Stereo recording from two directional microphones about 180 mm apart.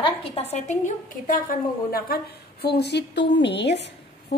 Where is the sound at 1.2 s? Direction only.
50° left (ahead or behind).